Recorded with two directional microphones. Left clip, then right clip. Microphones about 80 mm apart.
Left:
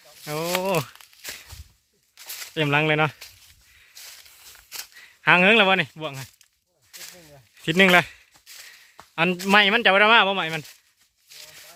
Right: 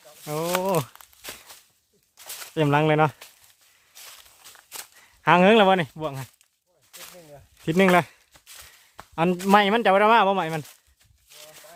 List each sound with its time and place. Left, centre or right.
0.2 s a sound: centre
2.6 s speech: right
3.9 s walk: centre
4.8 s livestock: right
5.3 s speech: right
5.6 s speech: right
6.9 s snake: centre
7.6 s speech: centre
8.4 s a sound: centre
9.0 s a sound: right
9.5 s speech: right
11.3 s a sound: centre